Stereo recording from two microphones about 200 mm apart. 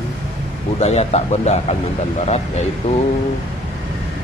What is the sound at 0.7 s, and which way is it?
Speech, 35° left (ahead or behind).